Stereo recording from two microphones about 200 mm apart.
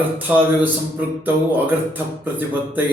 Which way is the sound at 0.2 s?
10° right (ahead or behind).